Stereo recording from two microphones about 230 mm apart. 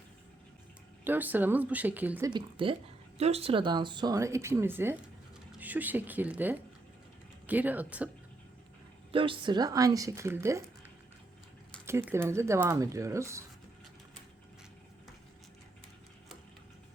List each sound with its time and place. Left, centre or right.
1.0 s speech: centre
9.1 s speech: right
11.9 s speech: centre